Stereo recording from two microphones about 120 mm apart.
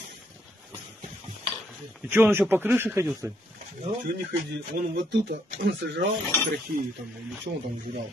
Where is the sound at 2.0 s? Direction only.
15° right (ahead or behind).